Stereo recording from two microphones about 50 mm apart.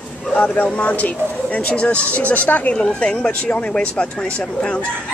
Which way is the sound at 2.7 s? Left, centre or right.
Centre.